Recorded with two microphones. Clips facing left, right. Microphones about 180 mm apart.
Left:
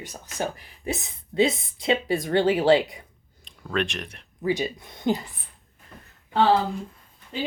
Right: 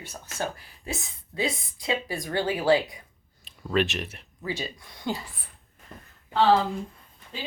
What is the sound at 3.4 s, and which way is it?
Speech, 5° right (ahead or behind).